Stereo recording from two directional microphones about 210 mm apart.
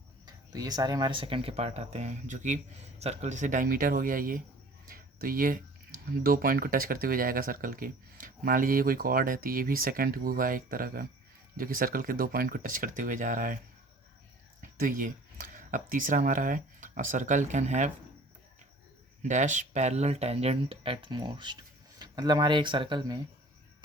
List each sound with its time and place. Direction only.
0.3 s speech: 20° right (ahead or behind); by 13.6 s 40° right (ahead or behind)
14.6 s speech: 40° right (ahead or behind)
19.2 s speech: 35° right (ahead or behind)